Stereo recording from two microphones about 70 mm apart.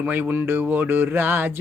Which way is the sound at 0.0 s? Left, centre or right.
Right.